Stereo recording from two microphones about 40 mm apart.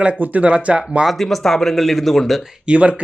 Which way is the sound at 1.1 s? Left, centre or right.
Centre.